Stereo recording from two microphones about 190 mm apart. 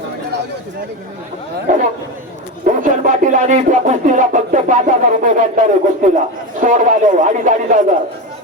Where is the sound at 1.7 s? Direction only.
45° right (ahead or behind).